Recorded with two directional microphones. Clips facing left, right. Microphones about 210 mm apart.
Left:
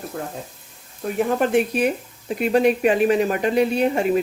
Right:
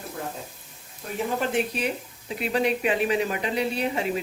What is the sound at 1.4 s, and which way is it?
Speech, 50° left (ahead or behind).